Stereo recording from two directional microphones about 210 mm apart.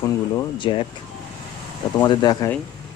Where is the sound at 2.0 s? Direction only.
20° left (ahead or behind).